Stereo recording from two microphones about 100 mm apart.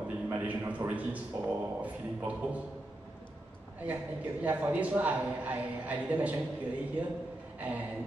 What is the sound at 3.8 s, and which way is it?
A man's voice, 15° right (ahead or behind).